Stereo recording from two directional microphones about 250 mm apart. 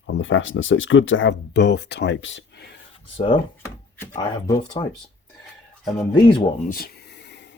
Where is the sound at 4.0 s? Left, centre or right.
Centre.